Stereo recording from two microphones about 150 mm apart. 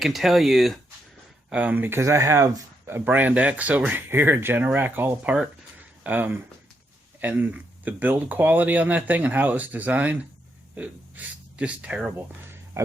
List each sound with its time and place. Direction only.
0.0 s speech: centre (ahead or behind)
11.5 s speech: 10° right (ahead or behind)